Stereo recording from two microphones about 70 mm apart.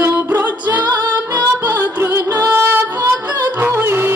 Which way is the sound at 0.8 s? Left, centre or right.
Right.